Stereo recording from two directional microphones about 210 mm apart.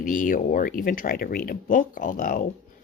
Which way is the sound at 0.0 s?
40° left (ahead or behind).